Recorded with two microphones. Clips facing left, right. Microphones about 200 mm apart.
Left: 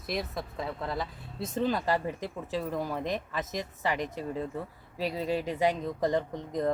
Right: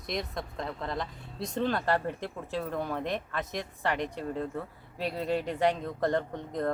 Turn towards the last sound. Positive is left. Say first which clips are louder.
# left 1 dB
turn(degrees=0)  # may be behind; listen again after turning